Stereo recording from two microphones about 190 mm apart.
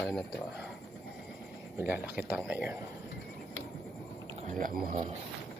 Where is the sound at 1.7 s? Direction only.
10° right (ahead or behind).